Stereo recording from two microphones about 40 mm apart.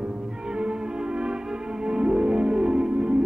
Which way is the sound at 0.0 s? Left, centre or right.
Centre.